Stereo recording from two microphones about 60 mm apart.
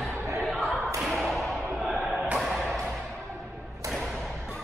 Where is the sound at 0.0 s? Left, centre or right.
Right.